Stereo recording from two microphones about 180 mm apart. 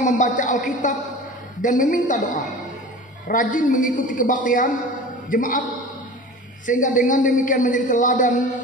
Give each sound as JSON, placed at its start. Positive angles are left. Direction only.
{"t": 0.0, "sound": "a man's voice", "side_deg": 45}